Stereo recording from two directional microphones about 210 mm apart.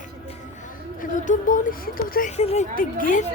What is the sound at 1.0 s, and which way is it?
Speech, 35° left (ahead or behind).